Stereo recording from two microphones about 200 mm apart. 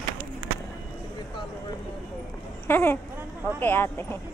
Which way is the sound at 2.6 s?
10° left (ahead or behind).